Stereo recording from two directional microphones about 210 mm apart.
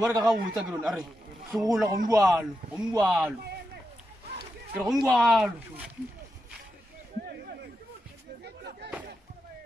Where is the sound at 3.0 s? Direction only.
Centre (ahead or behind).